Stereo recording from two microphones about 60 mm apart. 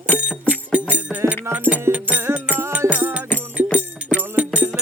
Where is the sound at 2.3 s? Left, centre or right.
Right.